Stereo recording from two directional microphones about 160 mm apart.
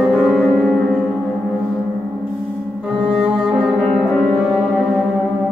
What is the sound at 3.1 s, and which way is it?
Brass instrument, centre (ahead or behind).